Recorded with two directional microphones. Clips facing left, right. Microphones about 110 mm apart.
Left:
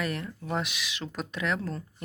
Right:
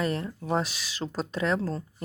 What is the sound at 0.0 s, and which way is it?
Speech, 30° right (ahead or behind).